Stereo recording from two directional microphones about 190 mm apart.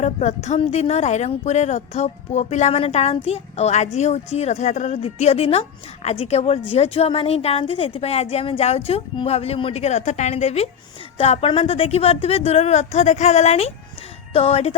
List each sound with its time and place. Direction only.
0.0 s a woman's voice: 35° left (ahead or behind)